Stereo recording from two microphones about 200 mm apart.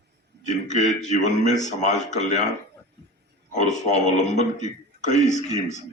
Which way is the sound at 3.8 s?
35° left (ahead or behind).